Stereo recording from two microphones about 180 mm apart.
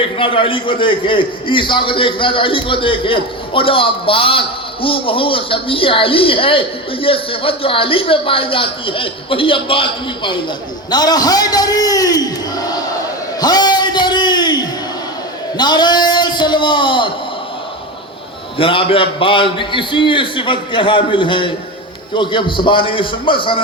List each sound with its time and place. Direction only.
0.2 s a man's voice: 30° left (ahead or behind)
13.4 s a sound: 25° left (ahead or behind)
15.5 s a man's voice: 25° left (ahead or behind)
18.5 s a man's voice: 30° left (ahead or behind)